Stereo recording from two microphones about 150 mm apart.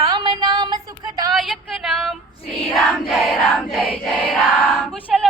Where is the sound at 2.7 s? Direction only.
Centre (ahead or behind).